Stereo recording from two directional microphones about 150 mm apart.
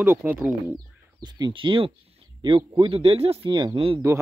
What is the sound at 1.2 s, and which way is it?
A man's voice, 30° right (ahead or behind).